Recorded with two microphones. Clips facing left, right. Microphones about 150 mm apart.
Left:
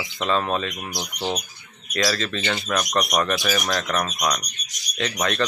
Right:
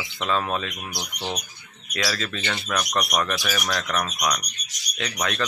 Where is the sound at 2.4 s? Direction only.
5° left (ahead or behind).